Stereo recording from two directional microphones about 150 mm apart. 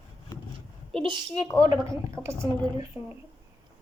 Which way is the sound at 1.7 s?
20° right (ahead or behind).